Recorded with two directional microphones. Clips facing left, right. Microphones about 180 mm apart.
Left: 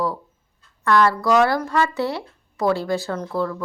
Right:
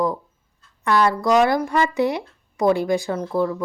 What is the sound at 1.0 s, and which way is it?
Speech, 15° right (ahead or behind).